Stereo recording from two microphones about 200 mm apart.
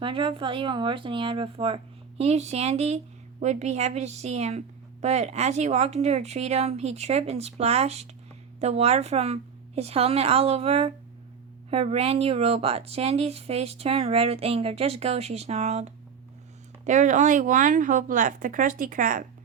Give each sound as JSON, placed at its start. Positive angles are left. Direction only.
{"t": 0.0, "sound": "a woman's voice", "side_deg": -25}